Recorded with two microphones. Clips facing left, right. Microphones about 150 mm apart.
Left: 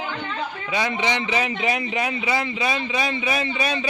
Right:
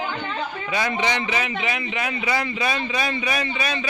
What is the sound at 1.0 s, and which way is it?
Speech, 20° left (ahead or behind).